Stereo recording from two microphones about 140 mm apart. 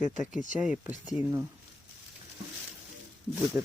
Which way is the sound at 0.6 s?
5° right (ahead or behind).